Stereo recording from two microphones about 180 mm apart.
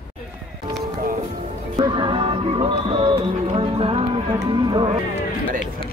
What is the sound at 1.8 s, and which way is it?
Music, 25° right (ahead or behind).